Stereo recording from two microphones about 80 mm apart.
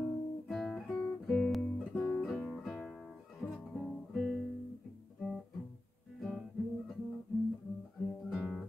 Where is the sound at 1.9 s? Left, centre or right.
Centre.